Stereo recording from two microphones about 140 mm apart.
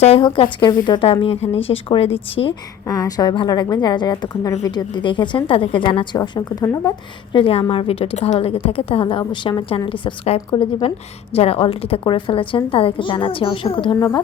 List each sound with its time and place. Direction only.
0.3 s a woman's voice: 35° left (ahead or behind)
2.8 s a woman's voice: 25° left (ahead or behind)
7.3 s a woman's voice: 40° left (ahead or behind)
13.9 s speech: 20° left (ahead or behind)